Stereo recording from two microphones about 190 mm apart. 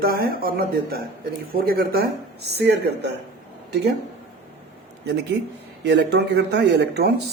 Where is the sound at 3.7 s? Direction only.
60° right (ahead or behind).